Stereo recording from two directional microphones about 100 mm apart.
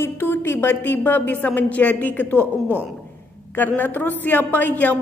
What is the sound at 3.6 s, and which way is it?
A woman's voice, 20° left (ahead or behind).